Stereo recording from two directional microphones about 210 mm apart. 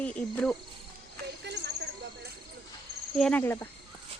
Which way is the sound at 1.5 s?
55° right (ahead or behind).